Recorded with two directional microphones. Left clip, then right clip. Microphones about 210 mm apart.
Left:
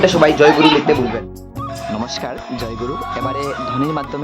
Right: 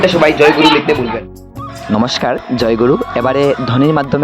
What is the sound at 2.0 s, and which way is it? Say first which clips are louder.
Speech: right 9 dB; 35° right (ahead or behind).